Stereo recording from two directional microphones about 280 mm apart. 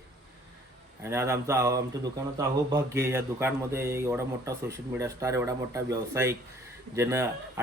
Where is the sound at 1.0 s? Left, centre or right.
Centre.